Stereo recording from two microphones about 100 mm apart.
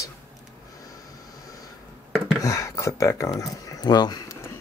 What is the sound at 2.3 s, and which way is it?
Speech, 30° left (ahead or behind).